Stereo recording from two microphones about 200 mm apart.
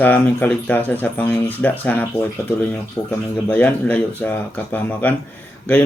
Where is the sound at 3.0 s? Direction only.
20° left (ahead or behind).